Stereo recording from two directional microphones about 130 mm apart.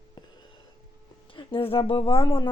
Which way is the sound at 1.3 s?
45° left (ahead or behind).